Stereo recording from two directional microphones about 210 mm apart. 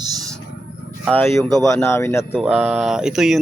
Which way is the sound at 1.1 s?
10° left (ahead or behind).